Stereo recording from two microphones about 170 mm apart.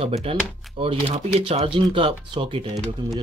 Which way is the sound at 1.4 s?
35° right (ahead or behind).